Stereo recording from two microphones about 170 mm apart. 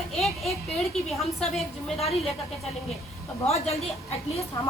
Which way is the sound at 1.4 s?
Centre (ahead or behind).